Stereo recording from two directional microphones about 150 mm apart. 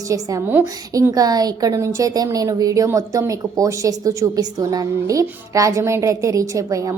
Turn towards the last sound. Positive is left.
turn(degrees=-20)  # may be behind; listen again after turning